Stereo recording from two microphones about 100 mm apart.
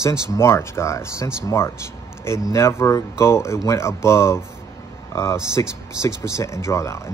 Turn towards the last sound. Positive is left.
turn(degrees=30)  # may be behind; listen again after turning